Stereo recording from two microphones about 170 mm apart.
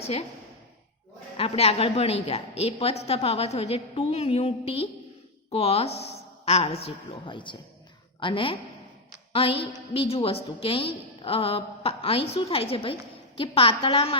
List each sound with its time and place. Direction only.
1.4 s a woman's voice: 35° left (ahead or behind)